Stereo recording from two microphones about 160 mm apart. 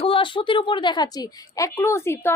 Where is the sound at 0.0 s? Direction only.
35° left (ahead or behind).